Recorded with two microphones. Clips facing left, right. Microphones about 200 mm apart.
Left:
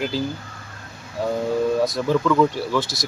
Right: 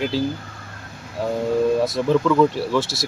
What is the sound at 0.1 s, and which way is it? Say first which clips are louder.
Speech: right 4 dB; centre (ahead or behind).